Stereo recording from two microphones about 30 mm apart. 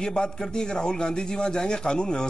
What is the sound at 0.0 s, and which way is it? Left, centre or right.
A man's voice, left.